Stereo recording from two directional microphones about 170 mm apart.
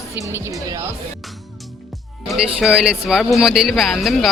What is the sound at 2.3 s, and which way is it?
Speech, centre (ahead or behind).